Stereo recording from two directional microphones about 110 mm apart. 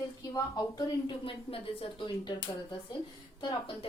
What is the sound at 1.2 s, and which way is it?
Speech, 55° left (ahead or behind).